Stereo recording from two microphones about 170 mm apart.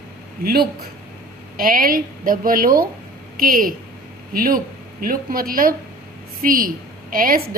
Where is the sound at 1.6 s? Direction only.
55° right (ahead or behind).